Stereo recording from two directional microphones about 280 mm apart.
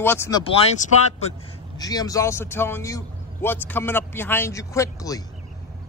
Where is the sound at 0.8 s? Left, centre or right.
Left.